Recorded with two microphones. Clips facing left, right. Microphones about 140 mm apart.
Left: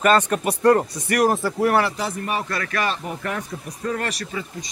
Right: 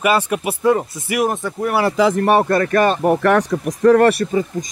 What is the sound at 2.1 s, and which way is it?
Speech, 60° right (ahead or behind).